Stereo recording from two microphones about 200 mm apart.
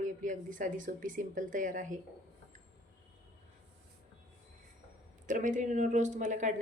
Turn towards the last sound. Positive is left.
turn(degrees=-40)  # may be behind; listen again after turning